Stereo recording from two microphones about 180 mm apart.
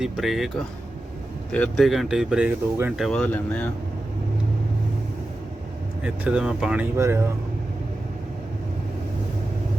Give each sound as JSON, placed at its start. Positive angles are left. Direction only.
{"t": 0.0, "sound": "speech", "side_deg": 0}
{"t": 2.9, "sound": "speech", "side_deg": 0}
{"t": 6.0, "sound": "speech", "side_deg": -5}
{"t": 6.9, "sound": "speech", "side_deg": -15}